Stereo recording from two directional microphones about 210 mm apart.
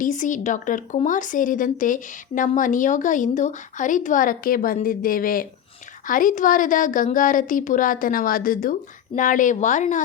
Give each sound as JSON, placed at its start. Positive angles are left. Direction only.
{"t": 0.0, "sound": "speech", "side_deg": 35}